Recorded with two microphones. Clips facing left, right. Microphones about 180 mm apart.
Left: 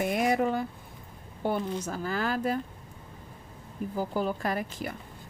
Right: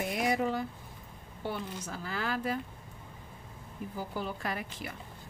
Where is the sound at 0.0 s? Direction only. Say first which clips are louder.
Left 4 dB; 55° left (ahead or behind).